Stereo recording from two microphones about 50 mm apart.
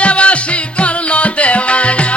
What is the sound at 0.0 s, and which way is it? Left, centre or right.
Music, left.